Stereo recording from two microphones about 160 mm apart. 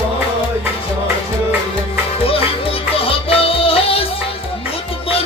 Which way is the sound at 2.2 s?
35° left (ahead or behind).